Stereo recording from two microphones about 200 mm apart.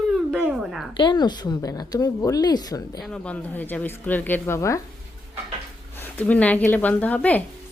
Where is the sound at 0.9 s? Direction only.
20° left (ahead or behind).